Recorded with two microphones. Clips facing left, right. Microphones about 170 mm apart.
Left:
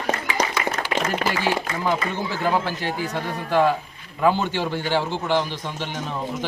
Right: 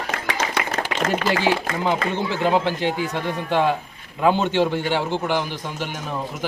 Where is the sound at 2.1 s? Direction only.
20° right (ahead or behind).